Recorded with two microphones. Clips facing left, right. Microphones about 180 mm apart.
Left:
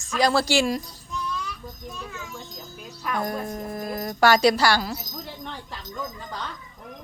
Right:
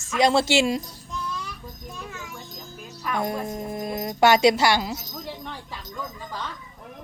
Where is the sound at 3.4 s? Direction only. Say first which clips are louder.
Right 1 dB; 20° right (ahead or behind).